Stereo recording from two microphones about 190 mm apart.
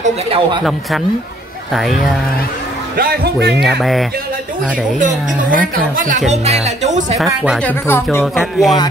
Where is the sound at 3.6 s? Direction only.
Centre (ahead or behind).